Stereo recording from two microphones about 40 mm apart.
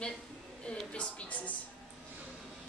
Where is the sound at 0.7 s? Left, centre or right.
Left.